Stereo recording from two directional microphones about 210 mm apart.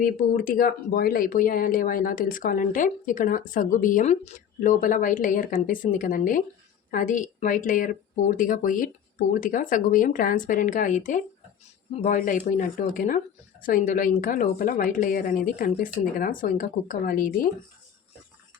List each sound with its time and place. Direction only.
0.0 s speech: 40° left (ahead or behind)